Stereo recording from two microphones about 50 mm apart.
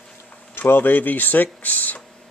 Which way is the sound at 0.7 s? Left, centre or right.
Left.